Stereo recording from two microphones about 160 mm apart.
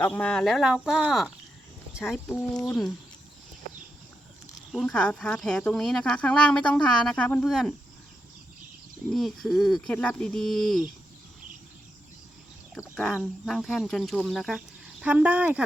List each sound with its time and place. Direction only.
0.0 s speech: 5° left (ahead or behind)
2.6 s speech: 20° left (ahead or behind)
4.7 s speech: 5° left (ahead or behind)
9.1 s speech: centre (ahead or behind)
12.7 s speech: centre (ahead or behind)